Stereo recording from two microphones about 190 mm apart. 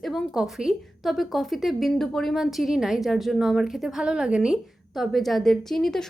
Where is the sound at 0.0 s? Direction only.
Centre (ahead or behind).